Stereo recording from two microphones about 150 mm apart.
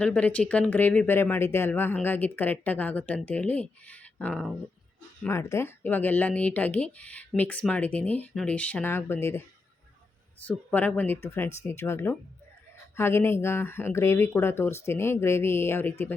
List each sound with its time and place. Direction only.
0.0 s speech: 10° left (ahead or behind)
10.4 s speech: 10° left (ahead or behind)